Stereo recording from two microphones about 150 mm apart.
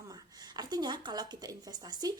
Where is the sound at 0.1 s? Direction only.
25° right (ahead or behind).